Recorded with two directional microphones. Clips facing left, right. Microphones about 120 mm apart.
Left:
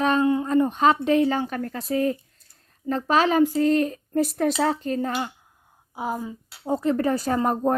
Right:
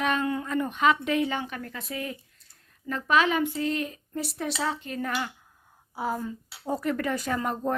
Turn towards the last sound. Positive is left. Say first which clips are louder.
# left 6 dB
turn(degrees=40)  # may be behind; listen again after turning